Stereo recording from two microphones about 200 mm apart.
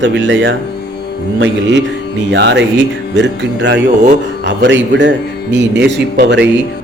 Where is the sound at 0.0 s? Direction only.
65° right (ahead or behind).